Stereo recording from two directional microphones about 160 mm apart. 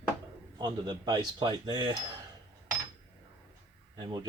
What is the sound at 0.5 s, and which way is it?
Speech, 25° right (ahead or behind).